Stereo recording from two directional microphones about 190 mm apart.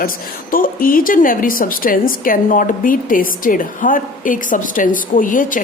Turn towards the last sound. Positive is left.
turn(degrees=45)  # may be behind; listen again after turning